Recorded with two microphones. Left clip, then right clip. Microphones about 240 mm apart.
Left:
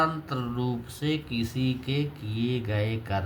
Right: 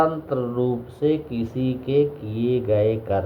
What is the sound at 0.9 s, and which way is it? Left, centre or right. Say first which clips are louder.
Speech: right 8 dB; left.